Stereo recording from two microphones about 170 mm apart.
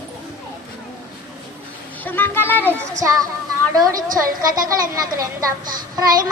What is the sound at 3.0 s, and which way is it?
A woman's voice, 20° right (ahead or behind).